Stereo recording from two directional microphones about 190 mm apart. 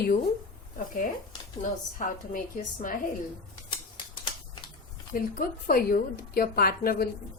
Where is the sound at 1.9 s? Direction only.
45° left (ahead or behind).